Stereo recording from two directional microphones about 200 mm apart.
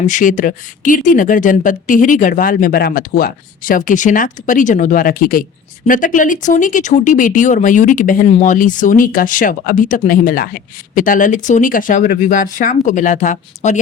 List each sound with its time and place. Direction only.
0.0 s speech: 40° left (ahead or behind)